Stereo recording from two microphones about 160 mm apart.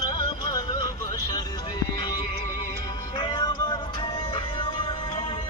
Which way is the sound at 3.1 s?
30° left (ahead or behind).